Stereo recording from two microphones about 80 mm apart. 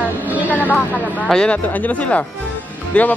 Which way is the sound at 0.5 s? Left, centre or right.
Left.